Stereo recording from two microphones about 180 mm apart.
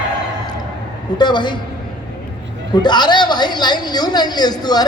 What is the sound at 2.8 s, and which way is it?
A woman's voice, 25° left (ahead or behind).